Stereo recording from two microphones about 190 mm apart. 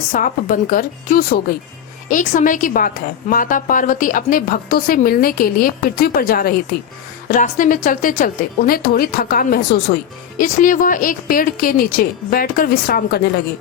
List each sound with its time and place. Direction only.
0.1 s a woman's voice: 45° left (ahead or behind)